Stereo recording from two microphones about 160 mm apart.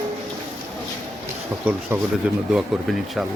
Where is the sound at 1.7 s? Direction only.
15° right (ahead or behind).